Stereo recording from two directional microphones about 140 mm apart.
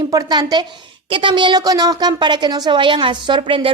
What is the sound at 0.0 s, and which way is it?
A woman's voice, 25° right (ahead or behind).